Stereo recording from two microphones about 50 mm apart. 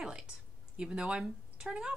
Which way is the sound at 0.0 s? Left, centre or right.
Centre.